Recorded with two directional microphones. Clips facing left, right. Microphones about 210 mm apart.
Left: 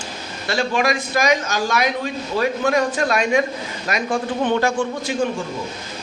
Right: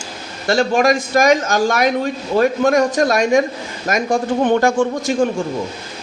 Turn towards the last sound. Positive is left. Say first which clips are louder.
# right 5 dB
turn(degrees=-50)  # may be behind; listen again after turning